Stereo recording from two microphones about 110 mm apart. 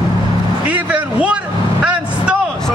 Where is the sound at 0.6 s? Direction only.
15° right (ahead or behind).